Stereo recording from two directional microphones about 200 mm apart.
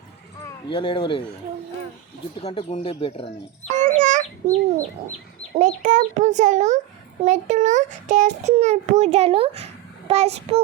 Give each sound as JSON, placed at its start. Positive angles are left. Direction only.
{"t": 0.4, "sound": "speech", "side_deg": 25}
{"t": 2.3, "sound": "speech", "side_deg": 25}
{"t": 3.9, "sound": "chicken", "side_deg": -40}
{"t": 4.4, "sound": "a child's voice", "side_deg": -30}